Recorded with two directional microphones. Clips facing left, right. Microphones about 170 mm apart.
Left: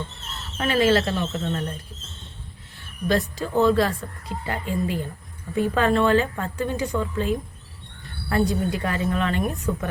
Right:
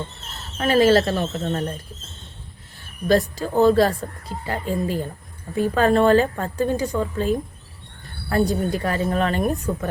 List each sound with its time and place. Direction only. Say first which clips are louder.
0.7 s speech: right 4 dB; 40° right (ahead or behind)
2.7 s speech: right 4 dB; 40° right (ahead or behind)